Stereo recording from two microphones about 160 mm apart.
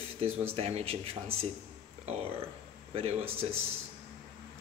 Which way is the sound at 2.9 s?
40° right (ahead or behind).